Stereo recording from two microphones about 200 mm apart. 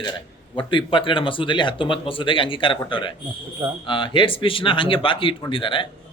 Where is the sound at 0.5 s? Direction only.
25° left (ahead or behind).